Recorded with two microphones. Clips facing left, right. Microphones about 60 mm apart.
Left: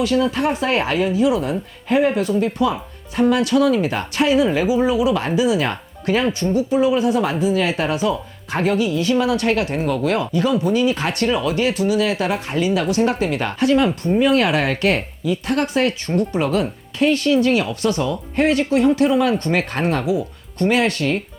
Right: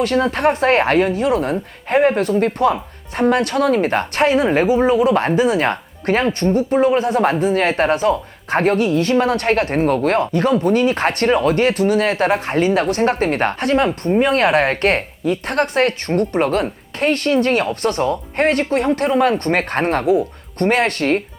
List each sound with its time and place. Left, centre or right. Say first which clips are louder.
0.0 s speech: right 2 dB; right